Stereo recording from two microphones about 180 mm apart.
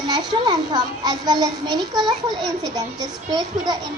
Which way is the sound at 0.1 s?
25° right (ahead or behind).